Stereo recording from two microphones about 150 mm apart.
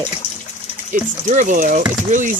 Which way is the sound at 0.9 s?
55° right (ahead or behind).